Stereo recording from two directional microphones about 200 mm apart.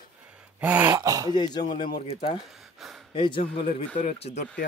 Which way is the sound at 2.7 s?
Centre (ahead or behind).